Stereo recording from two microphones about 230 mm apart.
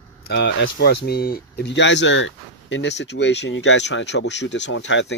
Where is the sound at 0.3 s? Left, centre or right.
Left.